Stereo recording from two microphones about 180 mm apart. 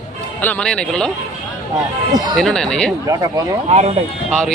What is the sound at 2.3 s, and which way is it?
Speech, centre (ahead or behind).